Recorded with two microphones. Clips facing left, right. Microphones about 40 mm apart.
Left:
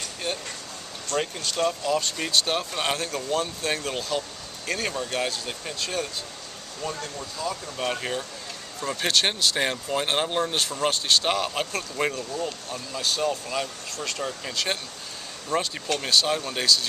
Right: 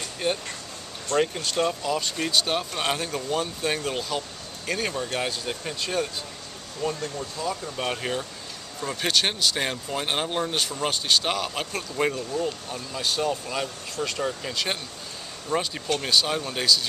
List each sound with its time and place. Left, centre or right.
0.2 s speech: centre
6.8 s speech: centre
7.2 s speech: centre